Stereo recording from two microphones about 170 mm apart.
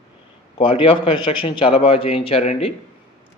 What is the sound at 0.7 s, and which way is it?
Speech, 30° left (ahead or behind).